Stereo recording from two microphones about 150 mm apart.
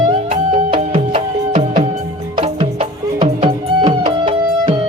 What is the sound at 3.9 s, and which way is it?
Music, 35° right (ahead or behind).